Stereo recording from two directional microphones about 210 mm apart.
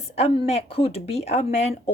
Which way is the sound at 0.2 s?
30° left (ahead or behind).